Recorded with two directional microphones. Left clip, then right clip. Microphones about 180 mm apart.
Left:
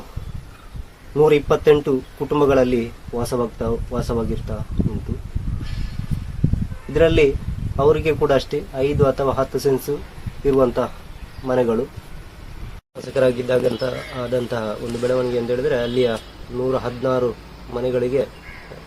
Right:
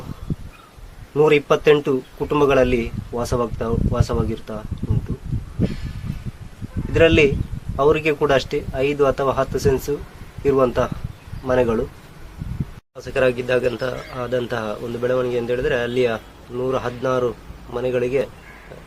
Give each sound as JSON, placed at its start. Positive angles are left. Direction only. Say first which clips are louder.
{"t": 1.1, "sound": "a man's voice", "louder": "even", "side_deg": -10}
{"t": 6.9, "sound": "a man's voice", "louder": "right 1 dB", "side_deg": -10}
{"t": 13.1, "sound": "a man's voice", "louder": "left 1 dB", "side_deg": -10}
{"t": 14.1, "sound": "a man's voice", "louder": "even", "side_deg": -15}